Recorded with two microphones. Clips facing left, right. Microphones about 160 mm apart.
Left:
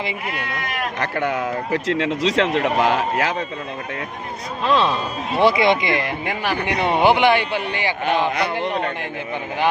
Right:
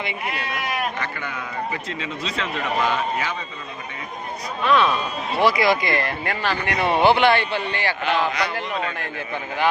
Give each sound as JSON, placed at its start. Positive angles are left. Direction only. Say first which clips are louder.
{"t": 0.9, "sound": "speech", "louder": "left 8 dB", "side_deg": 75}
{"t": 4.6, "sound": "a man's voice", "louder": "even", "side_deg": 30}
{"t": 8.3, "sound": "speech", "louder": "left 3 dB", "side_deg": 55}